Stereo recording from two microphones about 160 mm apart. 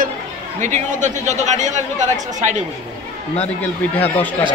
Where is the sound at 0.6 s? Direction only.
50° right (ahead or behind).